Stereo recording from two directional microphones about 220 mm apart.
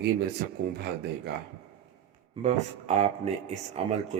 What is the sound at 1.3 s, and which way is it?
Speech, 50° right (ahead or behind).